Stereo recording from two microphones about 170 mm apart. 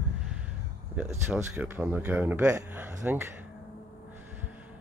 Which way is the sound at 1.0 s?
15° right (ahead or behind).